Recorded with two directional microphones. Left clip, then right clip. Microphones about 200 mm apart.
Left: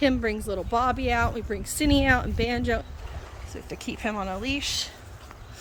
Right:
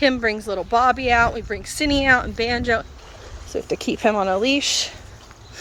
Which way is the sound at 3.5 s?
25° right (ahead or behind).